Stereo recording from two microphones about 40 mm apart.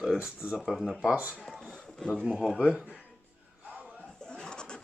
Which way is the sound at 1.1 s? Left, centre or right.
Right.